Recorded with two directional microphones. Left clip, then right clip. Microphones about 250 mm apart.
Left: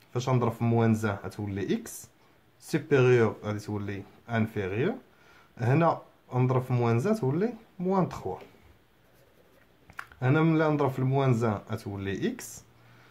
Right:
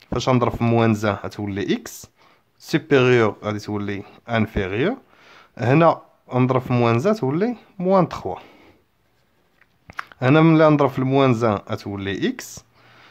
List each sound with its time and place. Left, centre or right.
0.0 s speech: right
9.8 s speech: right